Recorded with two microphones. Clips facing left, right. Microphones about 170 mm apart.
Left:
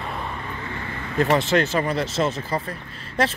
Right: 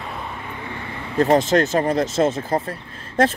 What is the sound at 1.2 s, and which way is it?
Speech, 45° right (ahead or behind).